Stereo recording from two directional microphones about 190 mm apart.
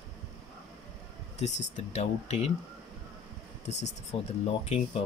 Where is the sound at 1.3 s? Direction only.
35° left (ahead or behind).